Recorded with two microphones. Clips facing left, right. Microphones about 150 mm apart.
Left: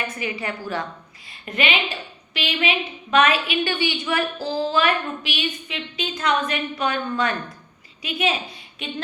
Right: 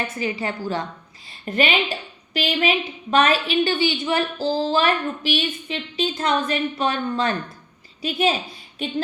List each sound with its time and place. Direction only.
0.2 s a woman's voice: 30° right (ahead or behind)